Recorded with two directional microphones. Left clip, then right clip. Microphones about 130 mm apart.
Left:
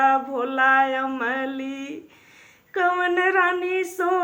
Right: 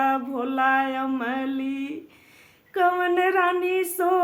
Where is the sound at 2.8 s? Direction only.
40° right (ahead or behind).